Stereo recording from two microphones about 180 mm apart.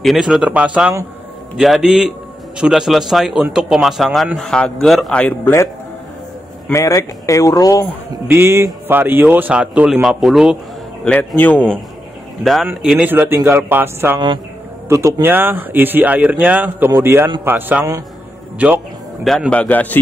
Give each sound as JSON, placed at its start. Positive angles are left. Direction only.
{"t": 0.0, "sound": "a man's voice", "side_deg": 0}
{"t": 6.7, "sound": "speech", "side_deg": 15}
{"t": 8.3, "sound": "speech", "side_deg": -15}
{"t": 11.1, "sound": "speech", "side_deg": 10}
{"t": 13.0, "sound": "speech", "side_deg": -10}
{"t": 19.2, "sound": "speech", "side_deg": 5}